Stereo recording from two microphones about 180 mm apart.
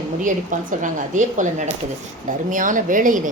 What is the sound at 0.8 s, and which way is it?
A woman's voice, 45° right (ahead or behind).